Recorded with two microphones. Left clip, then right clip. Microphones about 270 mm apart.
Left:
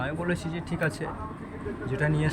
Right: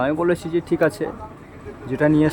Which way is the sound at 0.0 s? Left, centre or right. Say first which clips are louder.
Right 11 dB; centre.